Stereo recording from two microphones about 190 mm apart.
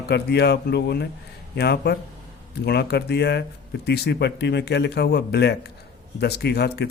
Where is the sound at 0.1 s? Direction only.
60° left (ahead or behind).